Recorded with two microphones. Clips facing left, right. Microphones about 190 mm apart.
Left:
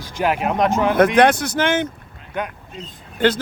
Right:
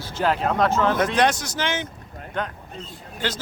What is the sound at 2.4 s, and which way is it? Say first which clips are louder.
Speech: left 2 dB; 10° left (ahead or behind).